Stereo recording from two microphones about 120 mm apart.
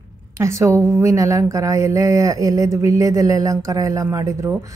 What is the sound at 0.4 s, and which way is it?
Speech, 25° right (ahead or behind).